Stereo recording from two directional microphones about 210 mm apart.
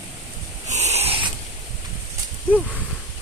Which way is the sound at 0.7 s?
30° right (ahead or behind).